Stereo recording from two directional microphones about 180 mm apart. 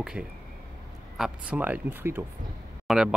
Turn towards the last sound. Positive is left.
turn(degrees=0)  # may be behind; listen again after turning